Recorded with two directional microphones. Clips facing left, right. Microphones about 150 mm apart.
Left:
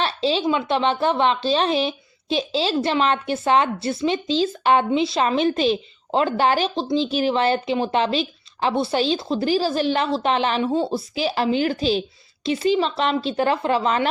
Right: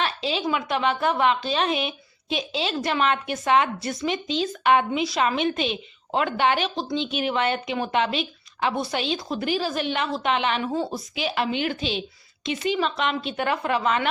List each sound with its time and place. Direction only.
0.0 s a woman's voice: 30° left (ahead or behind)